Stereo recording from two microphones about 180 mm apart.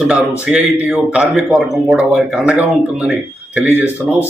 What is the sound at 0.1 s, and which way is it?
A man's voice, 5° right (ahead or behind).